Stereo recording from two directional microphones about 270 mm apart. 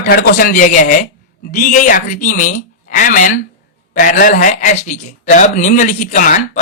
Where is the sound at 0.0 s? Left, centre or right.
Left.